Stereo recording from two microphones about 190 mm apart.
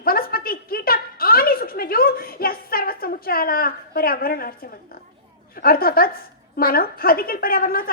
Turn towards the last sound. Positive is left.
turn(degrees=50)  # may be behind; listen again after turning